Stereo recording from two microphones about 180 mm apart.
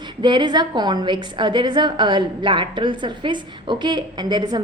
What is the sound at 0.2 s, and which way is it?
A woman's voice, 25° right (ahead or behind).